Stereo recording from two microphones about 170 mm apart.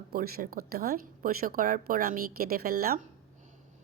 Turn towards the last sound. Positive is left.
turn(degrees=-60)  # may be behind; listen again after turning